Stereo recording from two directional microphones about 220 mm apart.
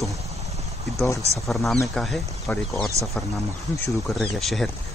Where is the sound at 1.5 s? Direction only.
Centre (ahead or behind).